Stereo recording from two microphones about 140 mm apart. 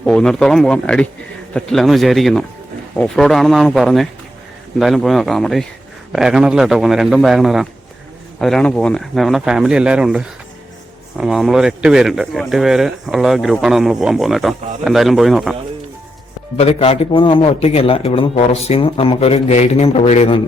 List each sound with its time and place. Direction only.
0.0 s a man's voice: 5° left (ahead or behind)
16.6 s a man's voice: 45° left (ahead or behind)